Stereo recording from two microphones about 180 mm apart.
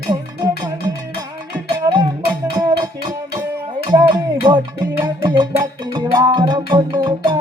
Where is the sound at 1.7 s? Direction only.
25° right (ahead or behind).